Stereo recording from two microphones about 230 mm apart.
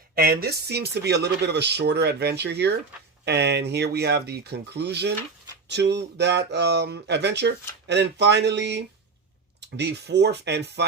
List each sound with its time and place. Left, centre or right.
0.2 s speech: right